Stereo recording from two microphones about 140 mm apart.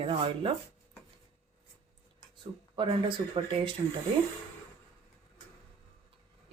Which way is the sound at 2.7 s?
35° right (ahead or behind).